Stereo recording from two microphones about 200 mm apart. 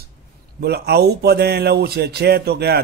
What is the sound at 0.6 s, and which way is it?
Speech, 55° right (ahead or behind).